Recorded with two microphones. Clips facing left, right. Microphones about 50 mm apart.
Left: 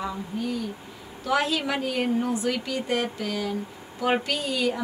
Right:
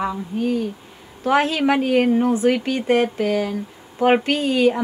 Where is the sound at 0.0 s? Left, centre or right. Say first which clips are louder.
Right 7 dB; right.